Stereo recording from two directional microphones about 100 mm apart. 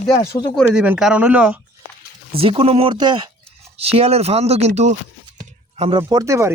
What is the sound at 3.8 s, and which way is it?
Speech, 85° right.